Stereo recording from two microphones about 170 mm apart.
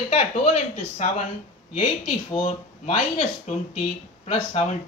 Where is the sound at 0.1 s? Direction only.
40° left (ahead or behind).